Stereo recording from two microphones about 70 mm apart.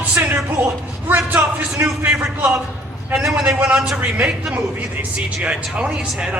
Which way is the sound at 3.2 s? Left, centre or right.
Centre.